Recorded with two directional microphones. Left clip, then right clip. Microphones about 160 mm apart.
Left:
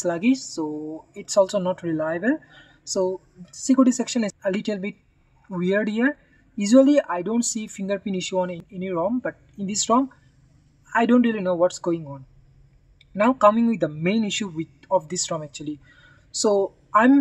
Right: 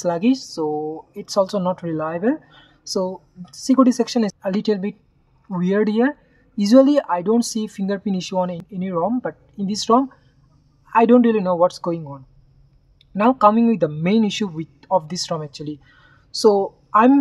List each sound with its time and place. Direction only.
0.0 s speech: 25° right (ahead or behind)